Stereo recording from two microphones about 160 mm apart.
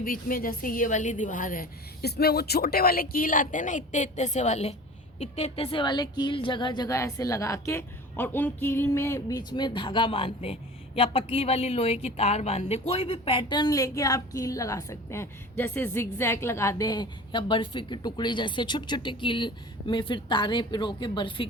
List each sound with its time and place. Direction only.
0.0 s a woman's voice: 60° left (ahead or behind); by 21.4 s 30° left (ahead or behind)